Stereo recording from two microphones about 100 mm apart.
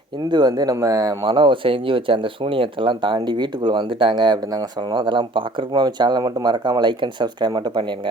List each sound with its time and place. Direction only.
0.3 s speech: 45° right (ahead or behind)
1.2 s speech: 55° right (ahead or behind)